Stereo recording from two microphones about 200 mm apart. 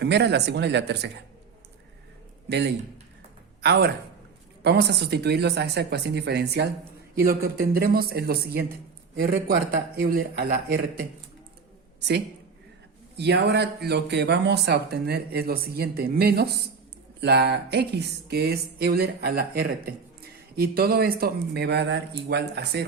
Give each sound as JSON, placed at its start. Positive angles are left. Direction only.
{"t": 0.0, "sound": "speech", "side_deg": -60}
{"t": 2.5, "sound": "speech", "side_deg": -55}
{"t": 13.1, "sound": "speech", "side_deg": -55}